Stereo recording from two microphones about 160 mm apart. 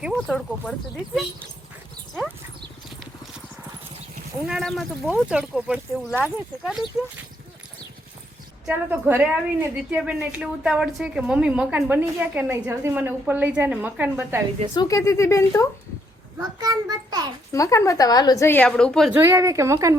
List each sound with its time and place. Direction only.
0.0 s speech: centre (ahead or behind)
4.4 s speech: centre (ahead or behind)
5.0 s a woman's voice: 10° right (ahead or behind)
8.6 s a woman's voice: 10° right (ahead or behind)
14.8 s a woman's voice: 20° left (ahead or behind)
16.6 s a child's voice: 25° right (ahead or behind)
17.5 s a woman's voice: 20° left (ahead or behind); by 19.1 s 5° left (ahead or behind)
19.1 s a woman's voice: 15° right (ahead or behind)